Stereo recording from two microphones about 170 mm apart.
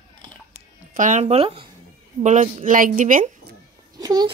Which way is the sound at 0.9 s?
45° right (ahead or behind).